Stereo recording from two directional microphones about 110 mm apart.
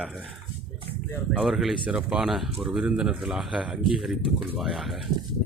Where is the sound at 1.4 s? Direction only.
Centre (ahead or behind).